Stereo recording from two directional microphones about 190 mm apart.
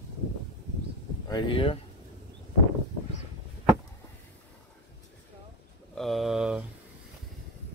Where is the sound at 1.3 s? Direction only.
25° left (ahead or behind).